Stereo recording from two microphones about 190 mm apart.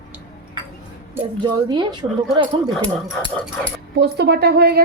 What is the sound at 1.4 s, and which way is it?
Speech, 25° right (ahead or behind).